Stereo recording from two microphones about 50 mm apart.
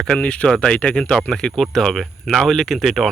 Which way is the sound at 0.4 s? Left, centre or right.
Centre.